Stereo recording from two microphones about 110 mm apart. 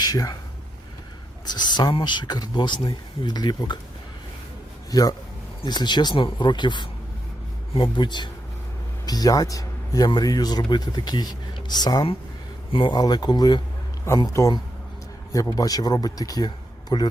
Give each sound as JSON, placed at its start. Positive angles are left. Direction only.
{"t": 0.0, "sound": "speech", "side_deg": 35}
{"t": 1.5, "sound": "speech", "side_deg": 40}
{"t": 4.9, "sound": "a man's voice", "side_deg": 35}
{"t": 12.7, "sound": "speech", "side_deg": 50}
{"t": 13.0, "sound": "speech", "side_deg": 35}